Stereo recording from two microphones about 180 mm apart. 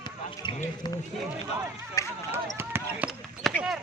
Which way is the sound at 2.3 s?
10° right (ahead or behind).